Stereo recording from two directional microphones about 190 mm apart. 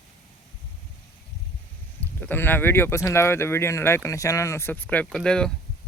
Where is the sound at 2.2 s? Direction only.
10° left (ahead or behind).